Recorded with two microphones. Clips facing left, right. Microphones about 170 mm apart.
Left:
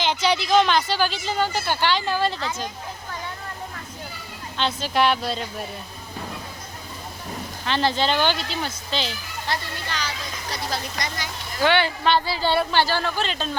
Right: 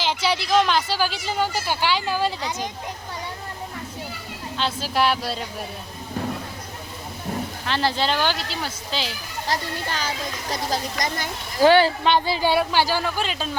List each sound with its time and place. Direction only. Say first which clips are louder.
0.0 s speech: left 1 dB; 5° right (ahead or behind)
4.5 s speech: left 1 dB; 5° right (ahead or behind)
7.6 s speech: left 2 dB; 5° right (ahead or behind)
9.5 s speech: right 3 dB; 45° right (ahead or behind)
12.0 s speech: right 1 dB; 15° right (ahead or behind)